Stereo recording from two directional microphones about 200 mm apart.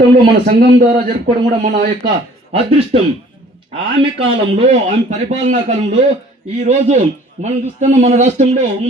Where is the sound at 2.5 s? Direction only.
30° right (ahead or behind).